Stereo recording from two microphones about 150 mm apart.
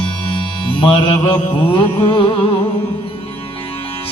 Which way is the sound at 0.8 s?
30° left (ahead or behind).